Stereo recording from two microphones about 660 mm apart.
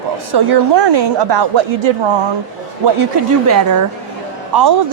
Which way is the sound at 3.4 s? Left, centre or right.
Right.